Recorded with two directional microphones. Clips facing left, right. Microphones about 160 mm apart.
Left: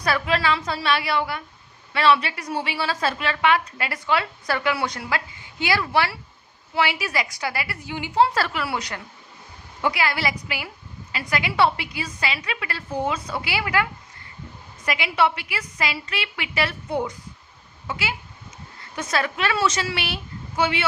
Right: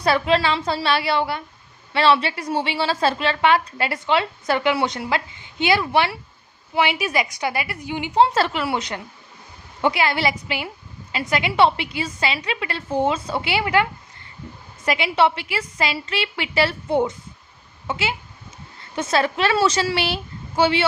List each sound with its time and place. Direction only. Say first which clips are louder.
0.0 s a woman's voice: right 4 dB; 25° right (ahead or behind)
14.8 s a woman's voice: right 3 dB; 30° right (ahead or behind)